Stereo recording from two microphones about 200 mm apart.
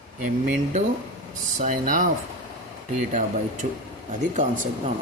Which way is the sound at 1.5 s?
40° right (ahead or behind).